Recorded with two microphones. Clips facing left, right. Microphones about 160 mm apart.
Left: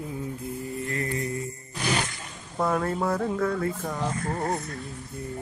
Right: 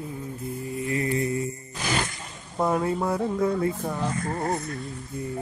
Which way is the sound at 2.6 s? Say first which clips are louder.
Right 1 dB; 10° right (ahead or behind).